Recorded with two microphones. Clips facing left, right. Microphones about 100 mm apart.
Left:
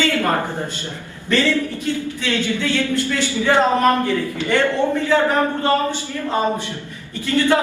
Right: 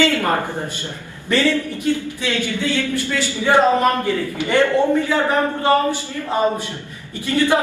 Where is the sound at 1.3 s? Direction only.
15° right (ahead or behind).